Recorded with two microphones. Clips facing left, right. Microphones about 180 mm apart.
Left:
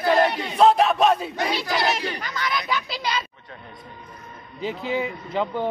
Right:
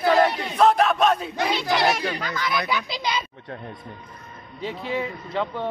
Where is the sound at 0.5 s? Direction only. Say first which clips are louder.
Left 2 dB; 30° left (ahead or behind).